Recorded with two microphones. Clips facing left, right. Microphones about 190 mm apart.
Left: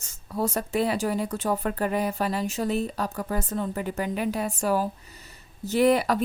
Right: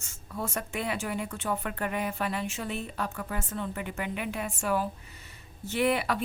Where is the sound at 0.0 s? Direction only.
35° left (ahead or behind).